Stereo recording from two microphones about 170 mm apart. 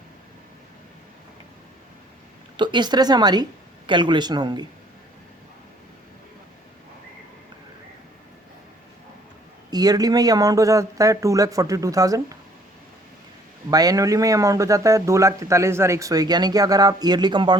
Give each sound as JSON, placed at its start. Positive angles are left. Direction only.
{"t": 2.6, "sound": "a man's voice", "side_deg": -25}
{"t": 9.6, "sound": "a man's voice", "side_deg": -25}
{"t": 13.7, "sound": "a man's voice", "side_deg": -20}